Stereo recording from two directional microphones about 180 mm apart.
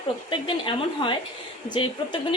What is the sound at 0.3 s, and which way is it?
Speech, 30° left (ahead or behind).